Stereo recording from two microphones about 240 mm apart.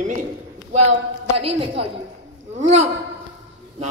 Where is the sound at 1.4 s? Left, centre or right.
Right.